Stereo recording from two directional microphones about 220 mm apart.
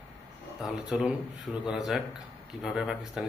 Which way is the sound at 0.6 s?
Centre (ahead or behind).